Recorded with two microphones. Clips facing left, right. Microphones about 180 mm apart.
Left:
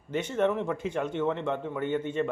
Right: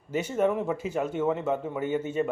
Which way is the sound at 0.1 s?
10° right (ahead or behind).